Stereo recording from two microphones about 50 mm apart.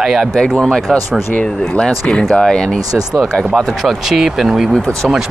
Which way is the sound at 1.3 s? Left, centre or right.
Left.